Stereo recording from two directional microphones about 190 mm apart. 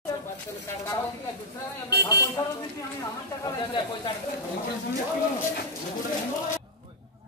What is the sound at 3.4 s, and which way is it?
Speech, 25° left (ahead or behind).